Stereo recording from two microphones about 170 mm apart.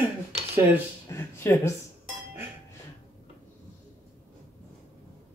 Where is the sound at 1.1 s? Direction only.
15° left (ahead or behind).